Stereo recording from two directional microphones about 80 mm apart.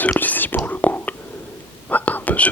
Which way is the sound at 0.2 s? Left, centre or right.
Left.